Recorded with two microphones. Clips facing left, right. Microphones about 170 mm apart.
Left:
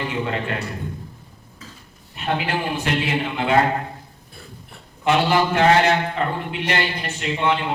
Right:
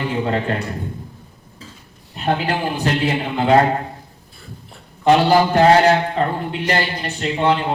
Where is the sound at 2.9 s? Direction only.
35° right (ahead or behind).